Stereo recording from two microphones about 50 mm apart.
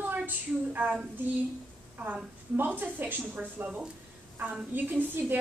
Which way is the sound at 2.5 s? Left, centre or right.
Right.